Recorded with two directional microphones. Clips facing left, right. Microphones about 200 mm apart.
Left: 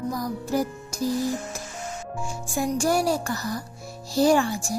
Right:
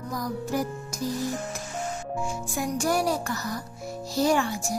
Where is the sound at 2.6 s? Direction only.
30° left (ahead or behind).